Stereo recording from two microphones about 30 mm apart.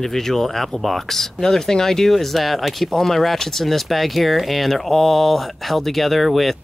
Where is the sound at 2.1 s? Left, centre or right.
Centre.